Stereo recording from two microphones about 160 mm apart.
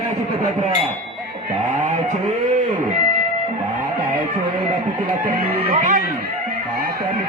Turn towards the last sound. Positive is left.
turn(degrees=-60)  # may be behind; listen again after turning